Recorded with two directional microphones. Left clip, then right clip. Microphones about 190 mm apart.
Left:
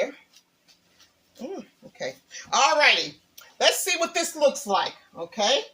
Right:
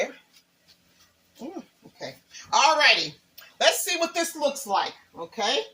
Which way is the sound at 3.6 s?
30° left (ahead or behind).